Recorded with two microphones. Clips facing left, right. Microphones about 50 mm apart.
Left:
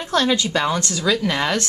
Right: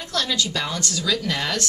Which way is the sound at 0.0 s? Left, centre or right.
Left.